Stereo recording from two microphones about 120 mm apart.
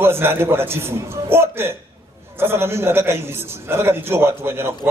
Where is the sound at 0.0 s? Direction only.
20° right (ahead or behind).